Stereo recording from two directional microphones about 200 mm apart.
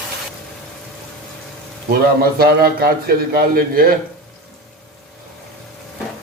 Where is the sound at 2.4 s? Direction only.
50° right (ahead or behind).